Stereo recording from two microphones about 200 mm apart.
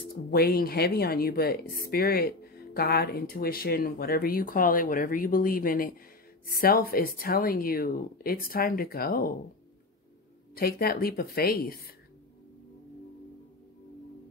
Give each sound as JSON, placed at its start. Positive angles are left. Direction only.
{"t": 0.1, "sound": "speech", "side_deg": 50}
{"t": 10.5, "sound": "speech", "side_deg": 50}